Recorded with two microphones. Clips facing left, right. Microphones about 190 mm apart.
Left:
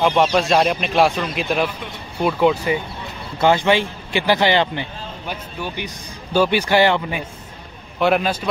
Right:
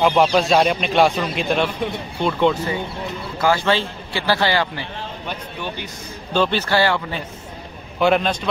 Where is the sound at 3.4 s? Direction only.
20° left (ahead or behind).